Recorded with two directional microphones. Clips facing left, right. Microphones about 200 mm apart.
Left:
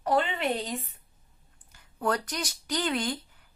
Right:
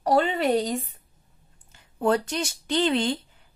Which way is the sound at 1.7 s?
25° right (ahead or behind).